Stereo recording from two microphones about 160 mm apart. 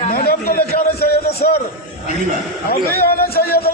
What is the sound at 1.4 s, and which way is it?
Speech, 55° left (ahead or behind).